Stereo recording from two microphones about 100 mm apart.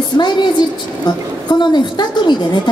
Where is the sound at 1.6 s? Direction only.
50° left (ahead or behind).